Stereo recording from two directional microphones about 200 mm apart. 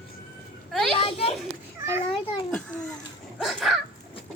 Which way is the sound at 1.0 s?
30° left (ahead or behind).